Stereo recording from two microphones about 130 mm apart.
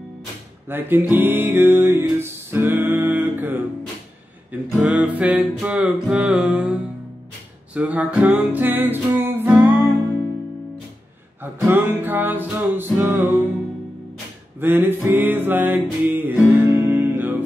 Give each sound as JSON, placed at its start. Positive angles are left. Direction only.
{"t": 0.7, "sound": "music", "side_deg": -15}
{"t": 11.6, "sound": "music", "side_deg": -15}
{"t": 14.6, "sound": "music", "side_deg": -15}